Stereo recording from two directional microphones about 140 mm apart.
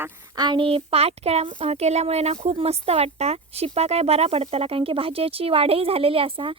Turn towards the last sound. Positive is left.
turn(degrees=-40)  # may be behind; listen again after turning